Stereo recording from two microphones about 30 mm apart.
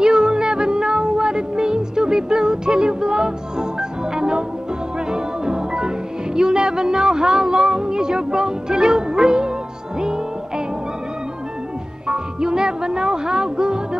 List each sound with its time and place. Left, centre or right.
0.0 s music: right
12.1 s music: right